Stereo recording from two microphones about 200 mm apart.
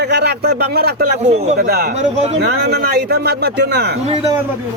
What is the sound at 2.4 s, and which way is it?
Speech, 55° right (ahead or behind).